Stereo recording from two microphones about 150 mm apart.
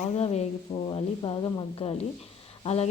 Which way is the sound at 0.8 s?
35° left (ahead or behind).